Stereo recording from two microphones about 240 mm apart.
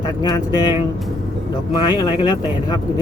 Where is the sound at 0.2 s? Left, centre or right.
Centre.